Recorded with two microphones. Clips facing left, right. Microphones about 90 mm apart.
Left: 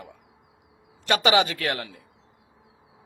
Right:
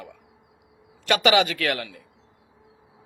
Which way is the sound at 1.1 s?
30° left (ahead or behind).